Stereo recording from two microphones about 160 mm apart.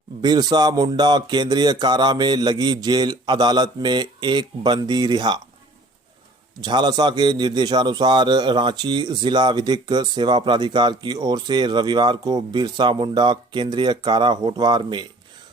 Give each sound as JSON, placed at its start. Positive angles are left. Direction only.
{"t": 0.2, "sound": "a man's voice", "side_deg": -25}
{"t": 6.7, "sound": "a man's voice", "side_deg": -25}